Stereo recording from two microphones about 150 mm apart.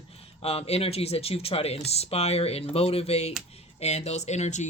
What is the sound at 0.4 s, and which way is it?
Speech, 45° left (ahead or behind).